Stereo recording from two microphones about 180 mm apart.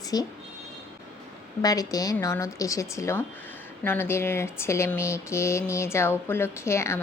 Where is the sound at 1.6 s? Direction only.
20° left (ahead or behind).